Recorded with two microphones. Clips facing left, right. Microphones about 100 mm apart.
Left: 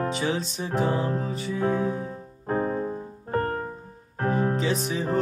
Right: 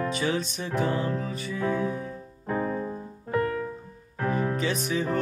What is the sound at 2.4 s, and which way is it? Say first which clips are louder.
Music: left 2 dB; 40° left (ahead or behind).